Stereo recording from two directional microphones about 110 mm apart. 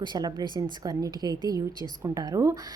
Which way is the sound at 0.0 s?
40° right (ahead or behind).